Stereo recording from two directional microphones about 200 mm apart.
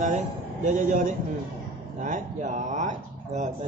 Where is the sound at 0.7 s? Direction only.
40° right (ahead or behind).